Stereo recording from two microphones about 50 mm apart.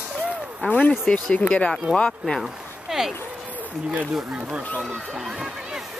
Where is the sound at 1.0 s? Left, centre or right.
Left.